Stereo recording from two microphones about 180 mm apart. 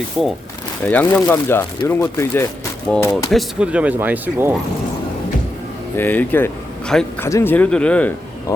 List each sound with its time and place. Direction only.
0.9 s speech: 10° left (ahead or behind)
3.2 s speech: 5° right (ahead or behind)
6.0 s speech: 10° left (ahead or behind)